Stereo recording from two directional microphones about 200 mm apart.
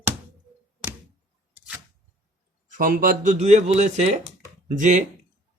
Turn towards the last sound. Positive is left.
turn(degrees=-40)  # may be behind; listen again after turning